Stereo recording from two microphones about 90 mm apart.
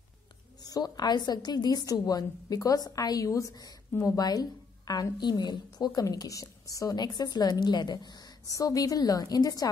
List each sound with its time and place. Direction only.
0.6 s a woman's voice: 45° left (ahead or behind)